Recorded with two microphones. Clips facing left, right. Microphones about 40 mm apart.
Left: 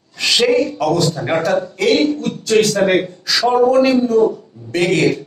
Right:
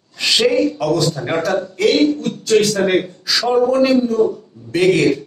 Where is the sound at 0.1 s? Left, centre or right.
Centre.